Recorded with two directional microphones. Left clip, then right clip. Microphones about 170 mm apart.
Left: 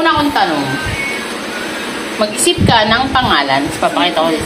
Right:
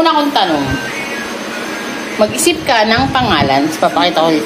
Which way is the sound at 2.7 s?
50° right (ahead or behind).